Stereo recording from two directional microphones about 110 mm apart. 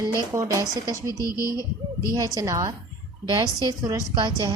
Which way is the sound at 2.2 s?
35° right (ahead or behind).